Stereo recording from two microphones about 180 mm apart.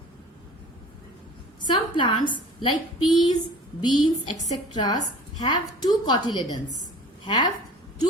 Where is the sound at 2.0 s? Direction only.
25° left (ahead or behind).